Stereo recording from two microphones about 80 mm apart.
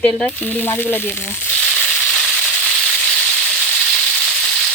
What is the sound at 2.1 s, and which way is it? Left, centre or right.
Frying, centre.